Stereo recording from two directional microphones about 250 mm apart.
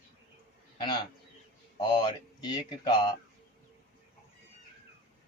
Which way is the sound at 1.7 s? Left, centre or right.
Centre.